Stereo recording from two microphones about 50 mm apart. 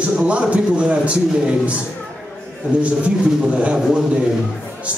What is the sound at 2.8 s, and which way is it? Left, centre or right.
Speech, right.